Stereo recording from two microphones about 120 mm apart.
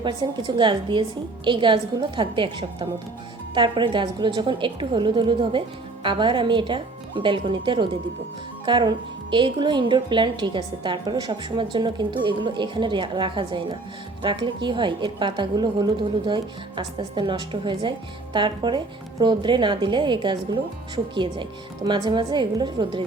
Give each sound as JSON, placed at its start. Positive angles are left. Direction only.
{"t": 0.0, "sound": "a woman's voice", "side_deg": -40}